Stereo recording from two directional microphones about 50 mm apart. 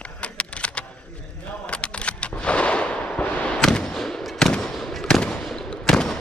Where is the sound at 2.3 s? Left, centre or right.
Left.